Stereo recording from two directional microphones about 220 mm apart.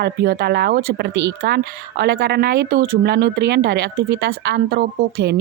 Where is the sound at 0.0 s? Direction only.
45° right (ahead or behind).